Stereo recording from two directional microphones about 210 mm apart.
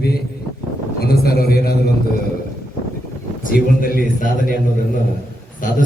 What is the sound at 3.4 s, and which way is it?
A man's voice, 45° left (ahead or behind).